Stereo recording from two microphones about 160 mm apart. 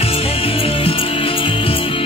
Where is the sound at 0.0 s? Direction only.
35° left (ahead or behind).